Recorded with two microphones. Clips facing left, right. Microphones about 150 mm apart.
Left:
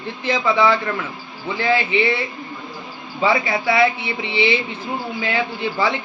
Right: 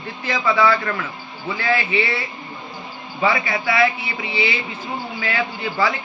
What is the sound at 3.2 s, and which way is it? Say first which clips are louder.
Speech: left 2 dB; 25° left (ahead or behind).